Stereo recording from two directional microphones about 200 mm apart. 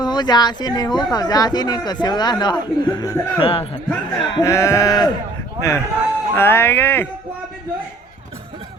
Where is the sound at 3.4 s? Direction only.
30° left (ahead or behind).